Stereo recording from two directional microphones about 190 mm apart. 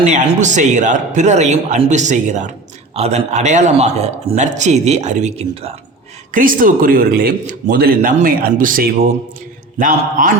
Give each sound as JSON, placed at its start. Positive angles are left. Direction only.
{"t": 0.0, "sound": "speech", "side_deg": -40}
{"t": 6.3, "sound": "speech", "side_deg": -45}